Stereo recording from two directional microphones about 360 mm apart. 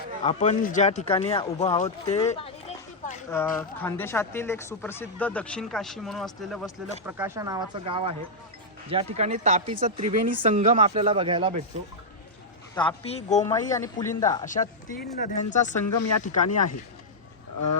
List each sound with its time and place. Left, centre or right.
0.2 s speech: centre
3.2 s speech: centre
12.7 s speech: centre
14.4 s speech: left